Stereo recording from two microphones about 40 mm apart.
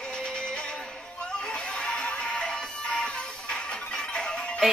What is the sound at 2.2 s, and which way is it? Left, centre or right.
Music, left.